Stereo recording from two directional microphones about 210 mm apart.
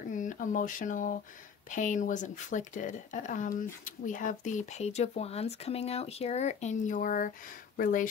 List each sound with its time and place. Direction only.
0.1 s speech: 40° left (ahead or behind)